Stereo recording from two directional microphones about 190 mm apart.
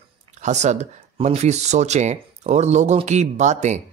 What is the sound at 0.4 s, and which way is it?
Speech, 40° right (ahead or behind).